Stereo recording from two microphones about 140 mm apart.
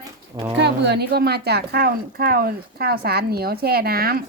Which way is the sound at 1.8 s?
90° right.